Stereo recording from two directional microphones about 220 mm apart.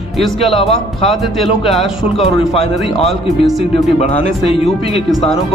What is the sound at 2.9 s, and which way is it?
Speech, centre (ahead or behind).